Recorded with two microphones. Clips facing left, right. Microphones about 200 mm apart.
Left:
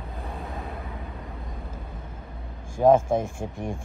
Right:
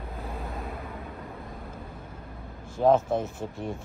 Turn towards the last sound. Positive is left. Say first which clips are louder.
# left 3 dB
turn(degrees=50)  # may be behind; listen again after turning